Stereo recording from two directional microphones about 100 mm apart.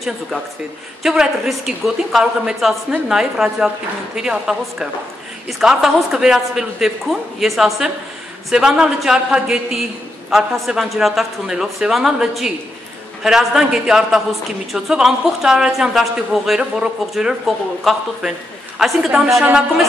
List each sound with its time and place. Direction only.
1.0 s a woman's voice: 5° right (ahead or behind)